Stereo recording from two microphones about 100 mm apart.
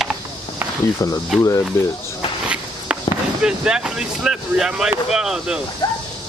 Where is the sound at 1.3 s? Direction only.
5° right (ahead or behind).